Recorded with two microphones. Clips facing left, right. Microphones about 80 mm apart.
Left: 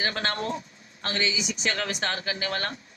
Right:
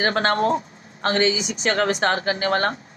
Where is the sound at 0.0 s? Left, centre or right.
Right.